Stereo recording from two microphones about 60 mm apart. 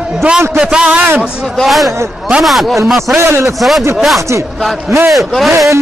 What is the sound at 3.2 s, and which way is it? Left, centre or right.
Speech, right.